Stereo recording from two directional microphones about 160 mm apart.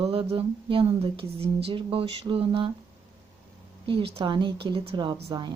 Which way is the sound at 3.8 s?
35° right (ahead or behind).